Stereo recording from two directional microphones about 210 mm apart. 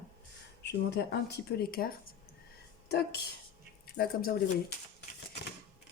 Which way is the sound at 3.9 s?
45° left (ahead or behind).